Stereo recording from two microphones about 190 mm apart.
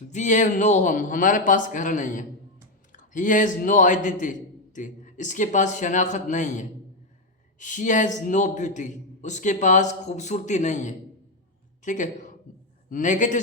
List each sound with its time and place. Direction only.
0.1 s a man's voice: 40° left (ahead or behind)